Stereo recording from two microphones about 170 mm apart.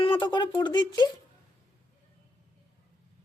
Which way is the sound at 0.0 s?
30° left (ahead or behind).